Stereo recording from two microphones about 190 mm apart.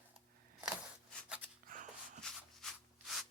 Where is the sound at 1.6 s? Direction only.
45° right (ahead or behind).